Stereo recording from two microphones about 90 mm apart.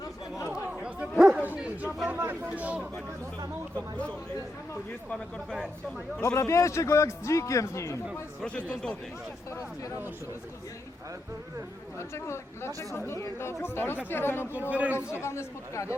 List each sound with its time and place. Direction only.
0.8 s bow-wow: 10° right (ahead or behind)
1.5 s chatter: 15° right (ahead or behind)
2.0 s speech: 25° right (ahead or behind)
3.8 s speech: 10° left (ahead or behind)
6.2 s a man's voice: 35° left (ahead or behind)
8.4 s speech: 10° left (ahead or behind)
11.9 s speech: 30° left (ahead or behind)
14.7 s a man's voice: 15° right (ahead or behind)
15.1 s a man's voice: 30° left (ahead or behind)